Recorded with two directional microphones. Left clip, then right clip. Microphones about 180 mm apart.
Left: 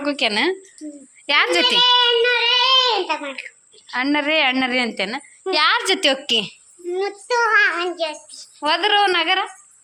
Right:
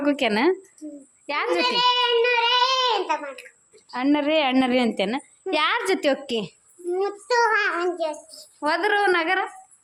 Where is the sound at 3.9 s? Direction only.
15° right (ahead or behind).